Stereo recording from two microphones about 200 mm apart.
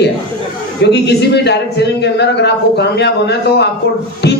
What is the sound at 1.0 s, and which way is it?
A man's voice, 55° left (ahead or behind).